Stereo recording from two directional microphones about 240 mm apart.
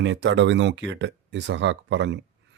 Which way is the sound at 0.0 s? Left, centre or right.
Right.